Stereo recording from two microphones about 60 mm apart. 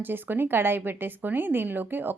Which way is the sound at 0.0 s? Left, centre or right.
Right.